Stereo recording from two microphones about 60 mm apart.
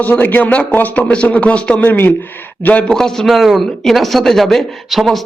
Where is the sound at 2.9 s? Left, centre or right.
Centre.